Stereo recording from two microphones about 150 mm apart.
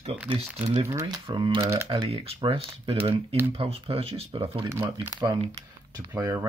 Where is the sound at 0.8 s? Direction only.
20° right (ahead or behind).